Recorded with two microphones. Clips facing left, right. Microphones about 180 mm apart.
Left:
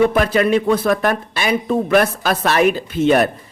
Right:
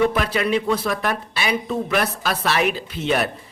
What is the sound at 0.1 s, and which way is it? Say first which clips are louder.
Speech: left 6 dB; 50° left (ahead or behind).